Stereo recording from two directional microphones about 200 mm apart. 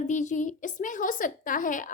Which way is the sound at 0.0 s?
35° left (ahead or behind).